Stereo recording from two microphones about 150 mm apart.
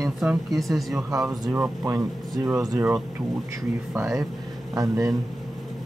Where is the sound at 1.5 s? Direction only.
20° right (ahead or behind).